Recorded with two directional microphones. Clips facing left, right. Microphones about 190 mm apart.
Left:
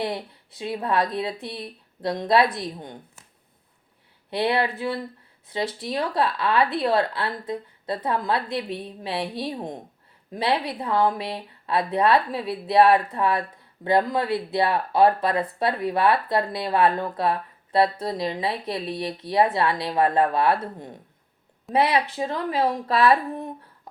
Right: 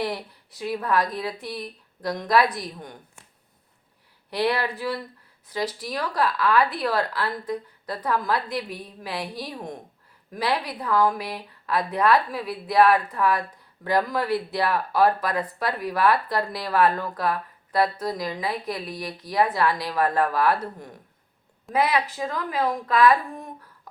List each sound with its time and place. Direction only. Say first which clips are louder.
0.6 s speech: even; 25° left (ahead or behind)
4.3 s a woman's voice: left 1 dB; 25° left (ahead or behind)